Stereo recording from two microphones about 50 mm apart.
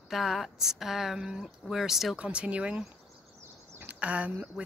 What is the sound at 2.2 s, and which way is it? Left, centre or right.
Speech, right.